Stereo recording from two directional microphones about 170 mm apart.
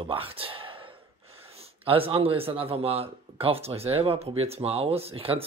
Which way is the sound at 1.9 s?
35° right (ahead or behind).